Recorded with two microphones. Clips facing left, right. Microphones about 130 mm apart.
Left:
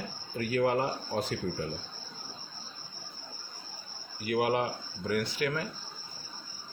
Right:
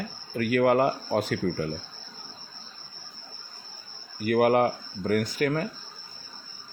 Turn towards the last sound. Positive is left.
turn(degrees=-45)  # may be behind; listen again after turning